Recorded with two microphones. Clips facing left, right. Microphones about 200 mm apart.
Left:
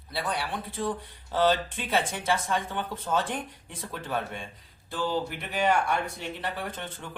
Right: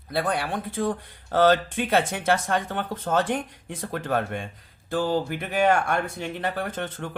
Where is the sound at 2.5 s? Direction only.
50° right (ahead or behind).